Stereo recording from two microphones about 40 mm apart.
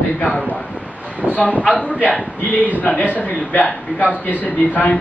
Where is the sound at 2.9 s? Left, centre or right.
Left.